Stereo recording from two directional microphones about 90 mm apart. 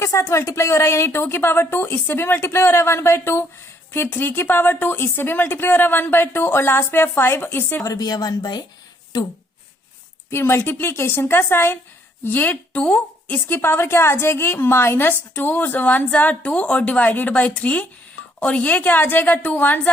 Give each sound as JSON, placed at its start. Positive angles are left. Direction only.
{"t": 0.0, "sound": "a woman's voice", "side_deg": 30}
{"t": 7.9, "sound": "a woman's voice", "side_deg": 45}
{"t": 10.2, "sound": "a woman's voice", "side_deg": 30}